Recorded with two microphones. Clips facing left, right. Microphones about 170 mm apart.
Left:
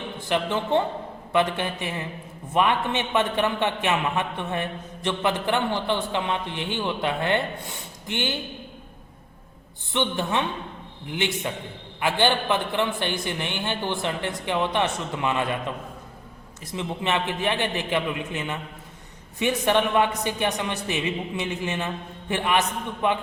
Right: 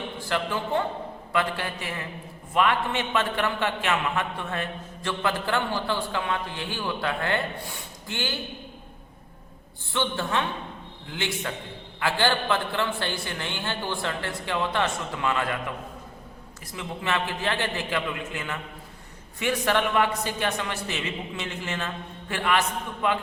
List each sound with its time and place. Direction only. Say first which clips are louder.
0.3 s a man's voice: left 4 dB; 20° left (ahead or behind)
9.9 s a man's voice: left 2 dB; 20° left (ahead or behind)
16.7 s a man's voice: left 3 dB; 20° left (ahead or behind)